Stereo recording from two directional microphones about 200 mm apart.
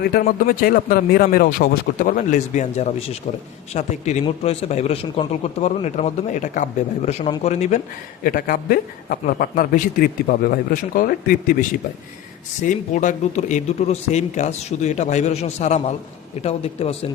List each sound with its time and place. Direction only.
0.0 s a man's voice: 50° left (ahead or behind); by 7.8 s 35° left (ahead or behind)
8.2 s a man's voice: 45° left (ahead or behind)
12.6 s a man's voice: 40° left (ahead or behind)